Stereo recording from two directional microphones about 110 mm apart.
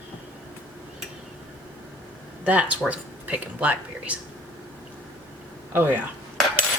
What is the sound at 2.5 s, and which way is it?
Speech, 15° right (ahead or behind).